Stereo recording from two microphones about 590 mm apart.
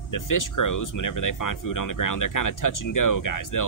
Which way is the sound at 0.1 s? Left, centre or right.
Left.